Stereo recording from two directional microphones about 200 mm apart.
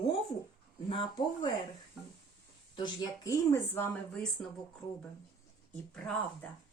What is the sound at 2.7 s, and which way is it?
A woman's voice, 20° left (ahead or behind).